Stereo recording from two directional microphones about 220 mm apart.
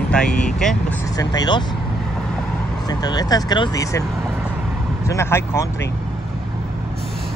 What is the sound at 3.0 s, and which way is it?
Speech, 20° left (ahead or behind).